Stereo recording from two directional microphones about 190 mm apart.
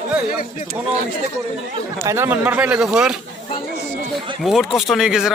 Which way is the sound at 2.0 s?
15° right (ahead or behind).